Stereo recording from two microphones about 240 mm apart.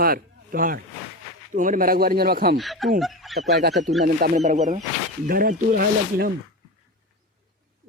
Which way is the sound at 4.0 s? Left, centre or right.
Right.